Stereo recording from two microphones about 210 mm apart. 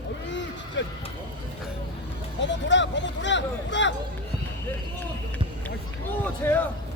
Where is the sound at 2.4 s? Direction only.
60° left (ahead or behind).